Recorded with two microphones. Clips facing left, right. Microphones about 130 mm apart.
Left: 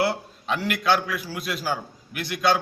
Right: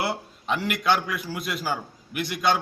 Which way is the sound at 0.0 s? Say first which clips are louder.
Left 4 dB; 5° right (ahead or behind).